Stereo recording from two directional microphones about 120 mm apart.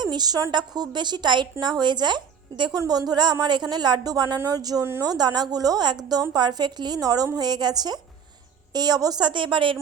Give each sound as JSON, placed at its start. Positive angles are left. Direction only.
{"t": 0.0, "sound": "a woman's voice", "side_deg": -35}